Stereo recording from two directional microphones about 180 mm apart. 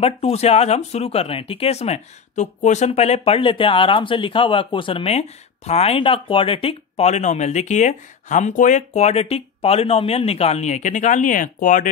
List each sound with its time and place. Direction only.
0.0 s speech: 35° left (ahead or behind)